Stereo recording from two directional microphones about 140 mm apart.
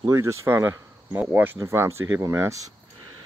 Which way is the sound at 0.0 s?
20° right (ahead or behind).